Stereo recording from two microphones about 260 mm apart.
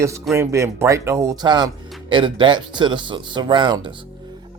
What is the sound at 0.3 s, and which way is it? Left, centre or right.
Speech, centre.